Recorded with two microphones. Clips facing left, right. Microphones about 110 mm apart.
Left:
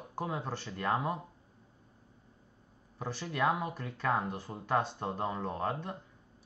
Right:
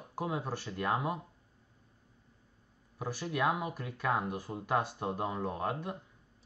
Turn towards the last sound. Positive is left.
turn(degrees=-10)  # may be behind; listen again after turning